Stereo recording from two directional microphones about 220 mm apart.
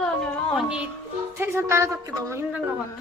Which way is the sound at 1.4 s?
10° right (ahead or behind).